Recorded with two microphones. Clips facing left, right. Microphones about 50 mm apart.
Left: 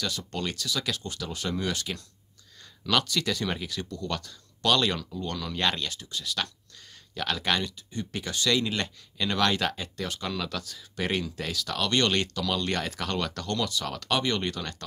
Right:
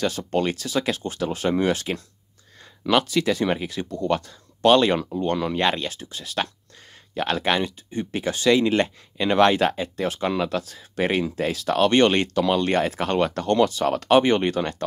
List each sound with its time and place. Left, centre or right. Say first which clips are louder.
0.0 s speech: right 9 dB; right